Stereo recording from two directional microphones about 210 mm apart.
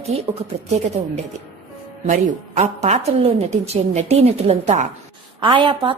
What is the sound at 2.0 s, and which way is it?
A woman's voice, 35° right (ahead or behind).